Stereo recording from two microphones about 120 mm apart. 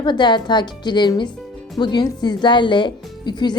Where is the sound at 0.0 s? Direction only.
40° left (ahead or behind).